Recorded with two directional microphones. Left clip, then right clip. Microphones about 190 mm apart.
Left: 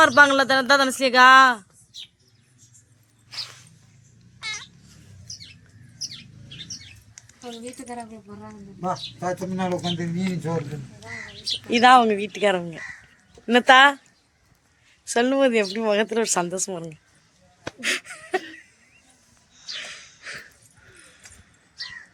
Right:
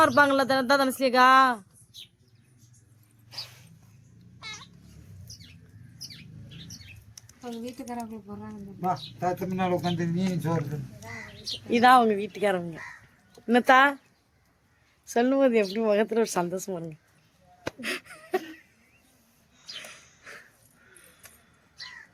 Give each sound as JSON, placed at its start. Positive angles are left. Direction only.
{"t": 0.0, "sound": "speech", "side_deg": 0}
{"t": 4.4, "sound": "babbling", "side_deg": 0}
{"t": 7.4, "sound": "speech", "side_deg": -10}
{"t": 8.8, "sound": "speech", "side_deg": 30}
{"t": 9.8, "sound": "speech", "side_deg": 0}
{"t": 11.7, "sound": "speech", "side_deg": 15}
{"t": 13.5, "sound": "speech", "side_deg": 5}
{"t": 15.0, "sound": "speech", "side_deg": 0}
{"t": 17.7, "sound": "a sound", "side_deg": 0}
{"t": 19.7, "sound": "a sound", "side_deg": 5}